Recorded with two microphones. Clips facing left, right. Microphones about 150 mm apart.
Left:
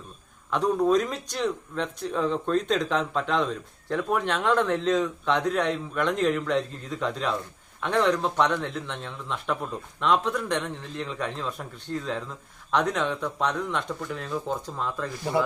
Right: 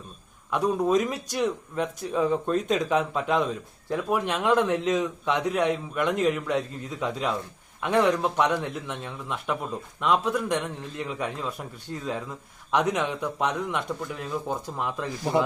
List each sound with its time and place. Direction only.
0.5 s speech: 5° right (ahead or behind)